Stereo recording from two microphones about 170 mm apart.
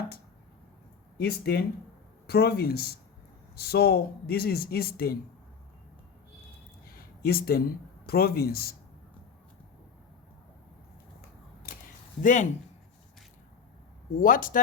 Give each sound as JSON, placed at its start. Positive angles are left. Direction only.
{"t": 1.2, "sound": "speech", "side_deg": 65}
{"t": 6.8, "sound": "a sound", "side_deg": 60}
{"t": 8.0, "sound": "speech", "side_deg": 65}
{"t": 12.2, "sound": "a man's voice", "side_deg": 50}
{"t": 14.2, "sound": "a man's voice", "side_deg": 55}